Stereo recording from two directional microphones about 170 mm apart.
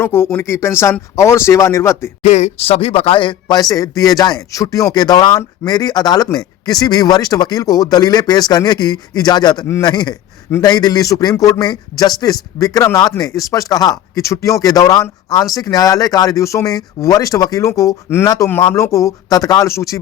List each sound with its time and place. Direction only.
0.0 s speech: 15° left (ahead or behind)
2.2 s a man's voice: 40° left (ahead or behind); by 20.0 s 20° left (ahead or behind)